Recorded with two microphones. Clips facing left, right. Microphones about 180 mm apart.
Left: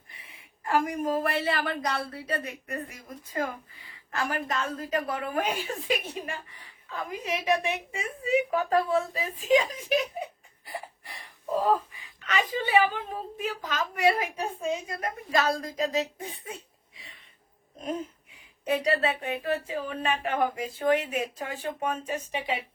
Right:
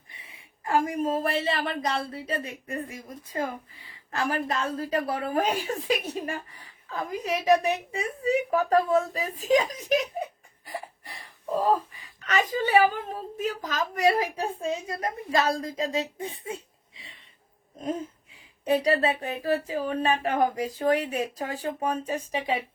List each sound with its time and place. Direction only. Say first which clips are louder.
0.2 s a woman's voice: right 1 dB; 25° right (ahead or behind); by 10.2 s 40° right (ahead or behind)
12.2 s a woman's voice: right 3 dB; 45° right (ahead or behind); by 16.6 s 25° right (ahead or behind)
18.6 s speech: right 3 dB; 35° right (ahead or behind)